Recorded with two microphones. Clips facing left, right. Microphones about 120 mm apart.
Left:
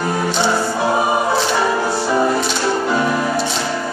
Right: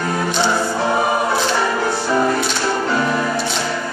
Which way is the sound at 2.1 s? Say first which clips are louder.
Left 1 dB; 10° left (ahead or behind).